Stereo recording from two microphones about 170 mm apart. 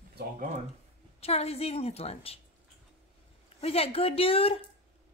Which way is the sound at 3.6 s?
35° left (ahead or behind).